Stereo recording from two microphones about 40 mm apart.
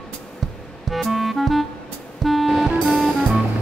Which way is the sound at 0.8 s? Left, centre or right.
Centre.